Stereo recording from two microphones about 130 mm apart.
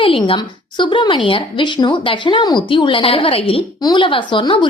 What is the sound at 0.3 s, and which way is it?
A woman's voice, 35° left (ahead or behind).